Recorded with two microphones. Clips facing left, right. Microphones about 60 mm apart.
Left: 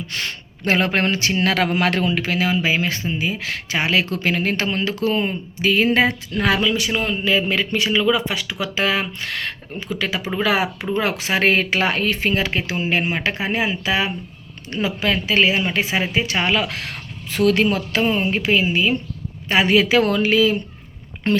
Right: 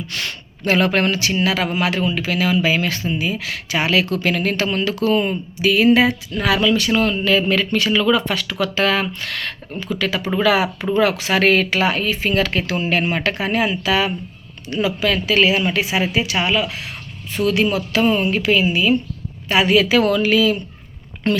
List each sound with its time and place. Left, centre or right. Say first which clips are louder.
0.1 s speech: even; left
1.4 s speech: left 2 dB; left
2.3 s speech: right 4 dB; left
6.6 s speech: right 4 dB; centre; by 12.3 s left
12.3 s speech: right 2 dB; left
18.0 s speech: right 3 dB; left